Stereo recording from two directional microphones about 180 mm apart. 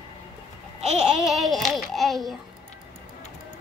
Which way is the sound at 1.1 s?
Centre (ahead or behind).